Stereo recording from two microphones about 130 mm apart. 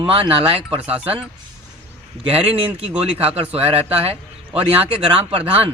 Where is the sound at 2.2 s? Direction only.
50° right (ahead or behind).